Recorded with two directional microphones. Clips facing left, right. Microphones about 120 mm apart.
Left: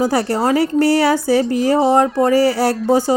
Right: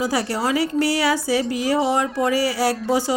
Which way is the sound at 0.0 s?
50° left (ahead or behind).